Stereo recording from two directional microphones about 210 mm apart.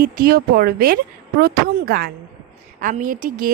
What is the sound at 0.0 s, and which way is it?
A woman's voice, 45° right (ahead or behind).